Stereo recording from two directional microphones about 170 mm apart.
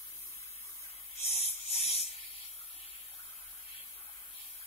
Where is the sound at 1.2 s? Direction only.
35° left (ahead or behind).